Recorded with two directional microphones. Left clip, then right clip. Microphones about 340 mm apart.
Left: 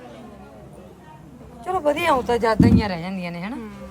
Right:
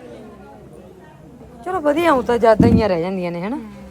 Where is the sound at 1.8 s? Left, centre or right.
Centre.